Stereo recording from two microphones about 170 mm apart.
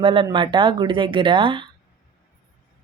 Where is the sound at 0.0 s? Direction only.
30° right (ahead or behind).